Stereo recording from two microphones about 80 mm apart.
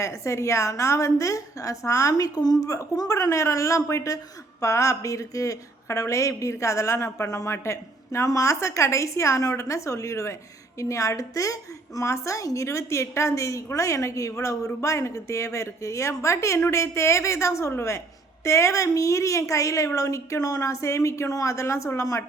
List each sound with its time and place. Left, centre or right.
0.0 s a woman's voice: left